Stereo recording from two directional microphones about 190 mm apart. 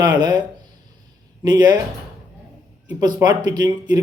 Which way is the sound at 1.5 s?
20° right (ahead or behind).